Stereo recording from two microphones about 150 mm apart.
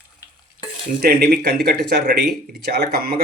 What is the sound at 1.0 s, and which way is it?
Speech, 90° right.